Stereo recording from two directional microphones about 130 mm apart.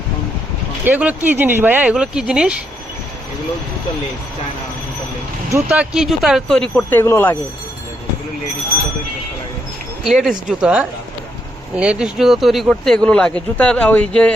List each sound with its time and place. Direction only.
0.9 s speech: 15° right (ahead or behind)
5.6 s speech: 10° right (ahead or behind)
6.9 s speech: 20° left (ahead or behind)
10.0 s speech: 5° right (ahead or behind)